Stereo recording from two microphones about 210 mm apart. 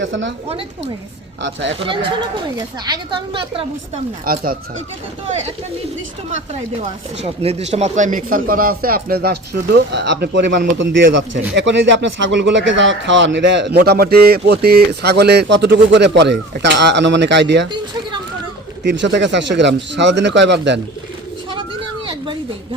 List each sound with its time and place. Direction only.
0.0 s a man's voice: 60° right (ahead or behind)
1.4 s a man's voice: 60° right (ahead or behind)
1.8 s a woman's voice: 25° right (ahead or behind)
4.3 s speech: 45° right (ahead or behind)
7.2 s a man's voice: 30° right (ahead or behind); by 17.7 s 55° right (ahead or behind)
18.9 s a man's voice: 55° right (ahead or behind)